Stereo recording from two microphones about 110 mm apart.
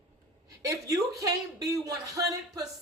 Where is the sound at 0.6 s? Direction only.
30° right (ahead or behind).